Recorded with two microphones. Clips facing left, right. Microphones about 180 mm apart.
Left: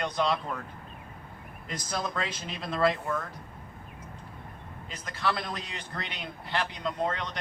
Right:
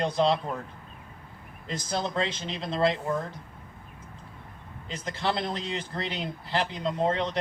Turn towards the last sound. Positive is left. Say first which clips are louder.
# right 5 dB
turn(degrees=-30)  # may be behind; listen again after turning